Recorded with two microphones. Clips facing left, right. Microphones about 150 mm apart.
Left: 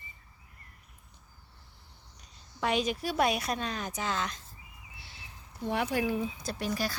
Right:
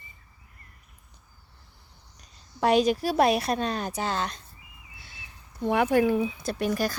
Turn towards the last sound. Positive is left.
turn(degrees=-50)  # may be behind; listen again after turning